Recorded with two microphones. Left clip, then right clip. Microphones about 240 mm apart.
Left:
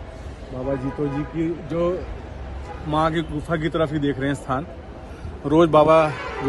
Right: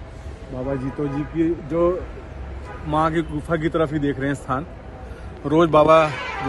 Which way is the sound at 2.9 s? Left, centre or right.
Centre.